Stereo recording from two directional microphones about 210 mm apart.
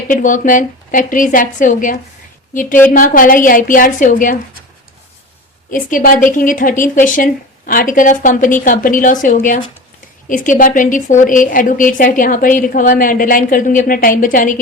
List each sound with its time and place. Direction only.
0.1 s a woman's voice: 40° left (ahead or behind)
5.7 s a woman's voice: 40° left (ahead or behind)